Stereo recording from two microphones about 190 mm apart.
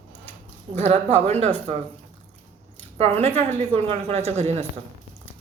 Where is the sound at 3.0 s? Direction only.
35° right (ahead or behind).